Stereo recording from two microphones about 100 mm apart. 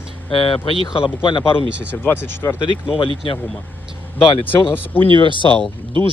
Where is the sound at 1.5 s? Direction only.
20° left (ahead or behind).